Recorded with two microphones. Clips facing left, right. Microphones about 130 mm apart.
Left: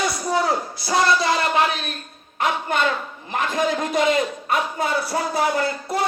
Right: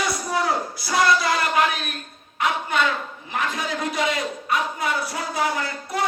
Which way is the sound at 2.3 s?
45° left (ahead or behind).